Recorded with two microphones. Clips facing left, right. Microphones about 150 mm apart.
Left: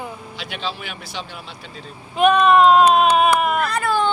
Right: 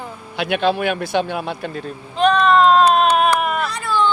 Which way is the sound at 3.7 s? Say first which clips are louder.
Left 1 dB; 55° left (ahead or behind).